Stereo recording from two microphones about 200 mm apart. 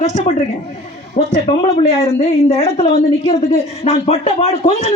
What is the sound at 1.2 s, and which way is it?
Speech, 40° left (ahead or behind).